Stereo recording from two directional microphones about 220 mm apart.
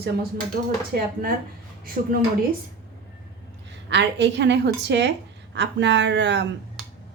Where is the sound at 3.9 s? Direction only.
50° right (ahead or behind).